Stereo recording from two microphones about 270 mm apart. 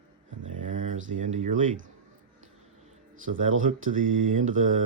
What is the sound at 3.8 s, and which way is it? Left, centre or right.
Speech, right.